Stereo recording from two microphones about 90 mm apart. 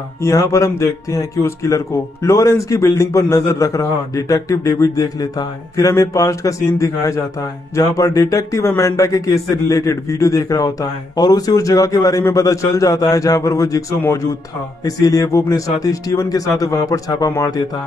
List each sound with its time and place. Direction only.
0.2 s a man's voice: 35° left (ahead or behind)